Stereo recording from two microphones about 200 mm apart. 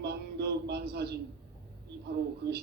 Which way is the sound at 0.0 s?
55° right (ahead or behind).